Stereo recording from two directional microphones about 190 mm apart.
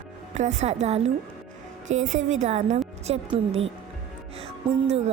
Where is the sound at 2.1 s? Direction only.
40° right (ahead or behind).